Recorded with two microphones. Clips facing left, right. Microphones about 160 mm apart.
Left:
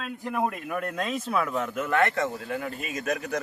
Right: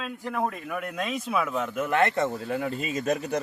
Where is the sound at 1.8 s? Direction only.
20° right (ahead or behind).